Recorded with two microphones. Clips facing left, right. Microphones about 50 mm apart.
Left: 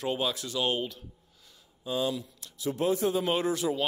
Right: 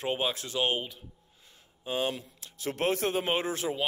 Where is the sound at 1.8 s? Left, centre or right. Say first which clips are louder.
Left 1 dB; right.